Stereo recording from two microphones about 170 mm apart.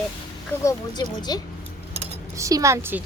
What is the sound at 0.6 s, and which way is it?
Speech, 25° left (ahead or behind).